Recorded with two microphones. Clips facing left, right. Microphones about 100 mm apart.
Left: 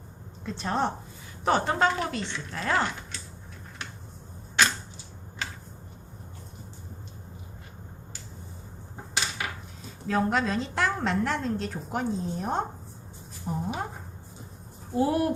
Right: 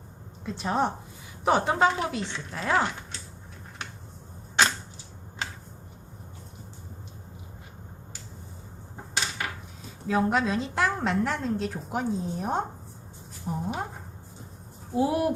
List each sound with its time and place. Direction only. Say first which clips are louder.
0.4 s a woman's voice: right 1 dB; 5° right (ahead or behind)
4.6 s arrow: right 1 dB; 25° right (ahead or behind)
10.1 s a woman's voice: right 1 dB; 5° right (ahead or behind)
14.9 s a woman's voice: even; 5° right (ahead or behind)